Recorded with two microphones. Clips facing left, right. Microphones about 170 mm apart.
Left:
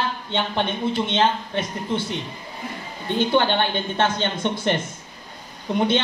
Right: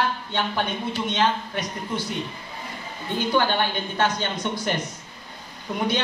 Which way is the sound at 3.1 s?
25° left (ahead or behind).